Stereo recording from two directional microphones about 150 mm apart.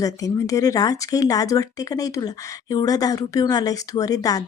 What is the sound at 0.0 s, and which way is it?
Speech, 20° left (ahead or behind).